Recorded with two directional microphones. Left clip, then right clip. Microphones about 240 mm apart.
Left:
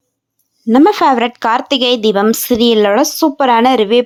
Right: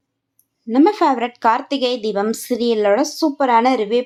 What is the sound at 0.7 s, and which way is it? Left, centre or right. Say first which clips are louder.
Speech: left 6 dB; left.